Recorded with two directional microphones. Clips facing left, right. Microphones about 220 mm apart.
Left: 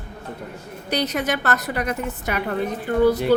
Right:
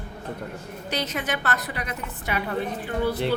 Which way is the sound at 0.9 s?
40° left (ahead or behind).